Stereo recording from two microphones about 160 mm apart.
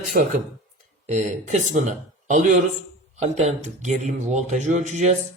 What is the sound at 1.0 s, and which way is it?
Speech, 50° right (ahead or behind).